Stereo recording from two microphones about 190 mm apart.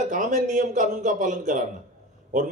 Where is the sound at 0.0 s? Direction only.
40° right (ahead or behind).